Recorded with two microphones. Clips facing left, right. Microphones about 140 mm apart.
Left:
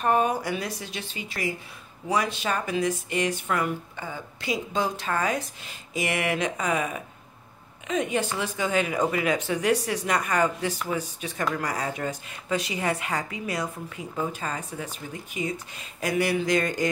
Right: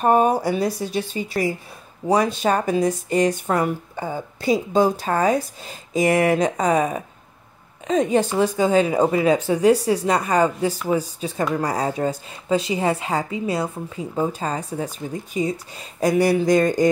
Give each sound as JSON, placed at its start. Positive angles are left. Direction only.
{"t": 0.0, "sound": "a woman's voice", "side_deg": -40}